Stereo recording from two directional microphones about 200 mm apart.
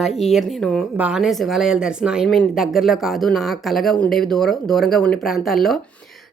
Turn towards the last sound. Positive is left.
turn(degrees=0)  # may be behind; listen again after turning